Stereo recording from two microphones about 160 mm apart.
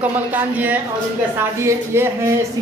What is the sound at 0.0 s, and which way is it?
Speech, 10° right (ahead or behind).